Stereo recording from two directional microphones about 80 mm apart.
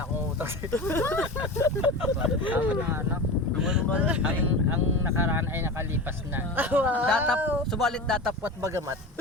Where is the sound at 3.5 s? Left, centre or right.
Centre.